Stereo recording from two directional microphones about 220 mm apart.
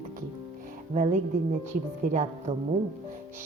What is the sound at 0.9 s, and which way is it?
Speech, 35° right (ahead or behind).